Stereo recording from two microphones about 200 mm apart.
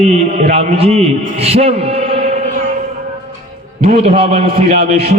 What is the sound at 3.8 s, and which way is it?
A man's voice, 30° right (ahead or behind).